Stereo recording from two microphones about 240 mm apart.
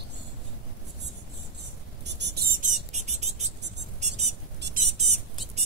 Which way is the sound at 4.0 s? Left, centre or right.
Right.